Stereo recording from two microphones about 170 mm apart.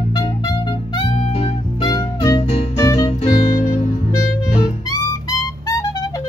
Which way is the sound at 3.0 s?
35° left (ahead or behind).